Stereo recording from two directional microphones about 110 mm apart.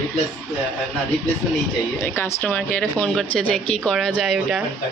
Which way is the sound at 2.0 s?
20° left (ahead or behind).